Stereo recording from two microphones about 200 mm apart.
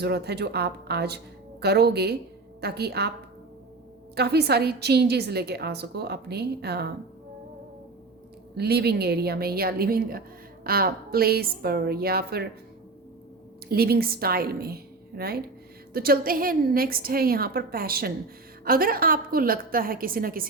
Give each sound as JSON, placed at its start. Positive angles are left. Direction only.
{"t": 0.0, "sound": "a woman's voice", "side_deg": -55}
{"t": 4.1, "sound": "a woman's voice", "side_deg": -55}
{"t": 8.5, "sound": "a woman's voice", "side_deg": -55}
{"t": 13.7, "sound": "a woman's voice", "side_deg": -50}